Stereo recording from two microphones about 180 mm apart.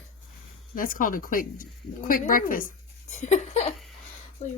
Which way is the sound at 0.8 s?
50° left (ahead or behind).